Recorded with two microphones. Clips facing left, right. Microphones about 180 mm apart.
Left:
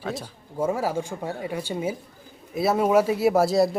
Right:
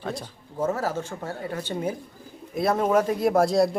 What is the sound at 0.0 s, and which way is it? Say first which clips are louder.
Speech: left 1 dB; 5° left (ahead or behind).